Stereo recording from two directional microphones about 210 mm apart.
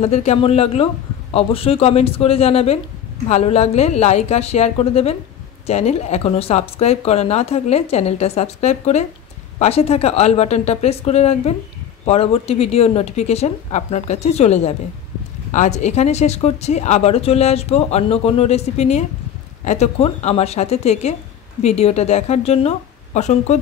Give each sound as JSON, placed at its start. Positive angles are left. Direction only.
{"t": 0.0, "sound": "speech", "side_deg": 30}